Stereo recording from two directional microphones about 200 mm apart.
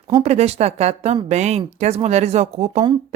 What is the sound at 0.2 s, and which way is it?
Speech, 30° right (ahead or behind).